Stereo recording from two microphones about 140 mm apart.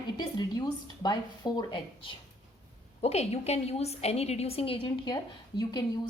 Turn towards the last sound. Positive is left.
turn(degrees=30)  # may be behind; listen again after turning